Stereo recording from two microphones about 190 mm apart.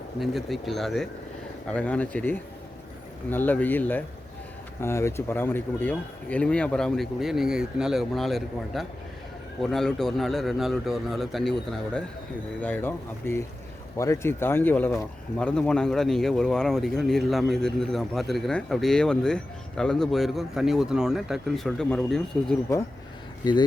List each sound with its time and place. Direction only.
0.2 s speech: centre (ahead or behind)
23.4 s speech: 25° left (ahead or behind)